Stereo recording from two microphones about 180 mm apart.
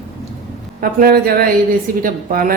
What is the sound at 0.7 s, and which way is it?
A woman's voice, 55° right (ahead or behind).